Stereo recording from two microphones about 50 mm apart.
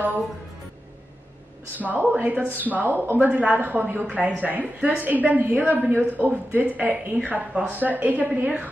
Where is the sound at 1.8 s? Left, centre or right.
Right.